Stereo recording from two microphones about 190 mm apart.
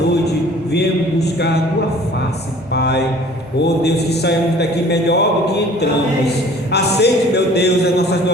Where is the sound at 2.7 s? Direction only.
60° left (ahead or behind).